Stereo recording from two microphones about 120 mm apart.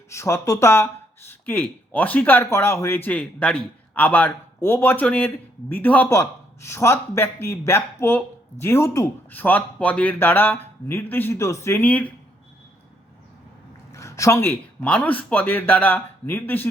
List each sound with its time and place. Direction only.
0.1 s speech: 25° left (ahead or behind)
6.1 s a man's voice: 25° left (ahead or behind)
13.9 s speech: 25° left (ahead or behind)